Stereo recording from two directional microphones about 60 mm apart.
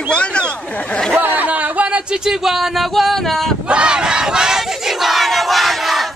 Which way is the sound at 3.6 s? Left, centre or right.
Centre.